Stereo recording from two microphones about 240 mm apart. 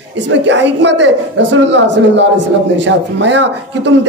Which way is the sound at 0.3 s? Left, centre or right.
Right.